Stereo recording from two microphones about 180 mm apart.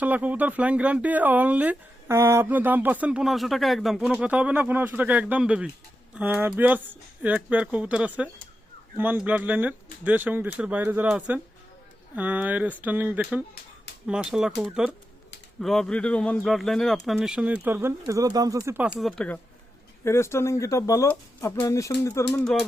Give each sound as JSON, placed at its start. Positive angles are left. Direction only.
{"t": 0.0, "sound": "speech", "side_deg": -10}
{"t": 22.3, "sound": "speech", "side_deg": 5}